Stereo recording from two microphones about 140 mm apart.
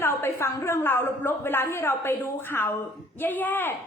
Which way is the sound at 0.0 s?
15° left (ahead or behind).